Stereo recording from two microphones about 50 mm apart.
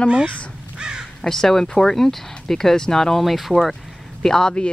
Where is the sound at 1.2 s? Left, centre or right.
Centre.